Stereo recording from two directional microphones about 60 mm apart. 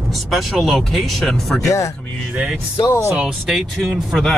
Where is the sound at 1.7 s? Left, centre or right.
Left.